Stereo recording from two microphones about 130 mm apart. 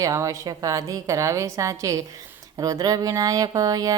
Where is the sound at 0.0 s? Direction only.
25° right (ahead or behind).